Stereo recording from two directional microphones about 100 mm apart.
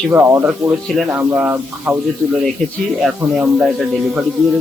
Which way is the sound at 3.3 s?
5° right (ahead or behind).